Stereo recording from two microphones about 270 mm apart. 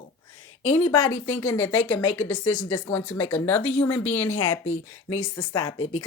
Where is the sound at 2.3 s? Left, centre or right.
Left.